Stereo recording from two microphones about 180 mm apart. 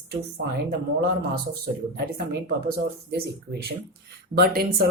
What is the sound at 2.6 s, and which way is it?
Speech, 65° right (ahead or behind).